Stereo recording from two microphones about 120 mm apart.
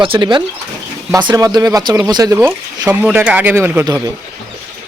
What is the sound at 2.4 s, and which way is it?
Speech, 15° right (ahead or behind).